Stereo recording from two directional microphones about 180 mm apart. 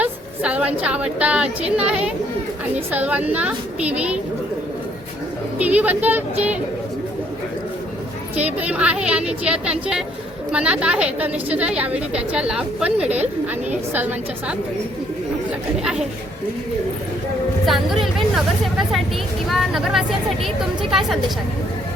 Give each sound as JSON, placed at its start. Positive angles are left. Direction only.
{"t": 0.0, "sound": "a woman's voice", "side_deg": -5}
{"t": 5.5, "sound": "a woman's voice", "side_deg": -10}
{"t": 8.4, "sound": "a woman's voice", "side_deg": -10}
{"t": 15.8, "sound": "speech", "side_deg": -5}
{"t": 17.7, "sound": "speech", "side_deg": 0}
{"t": 19.5, "sound": "speech", "side_deg": 0}